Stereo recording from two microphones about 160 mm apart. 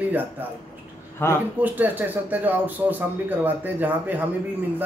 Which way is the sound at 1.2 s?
15° left (ahead or behind).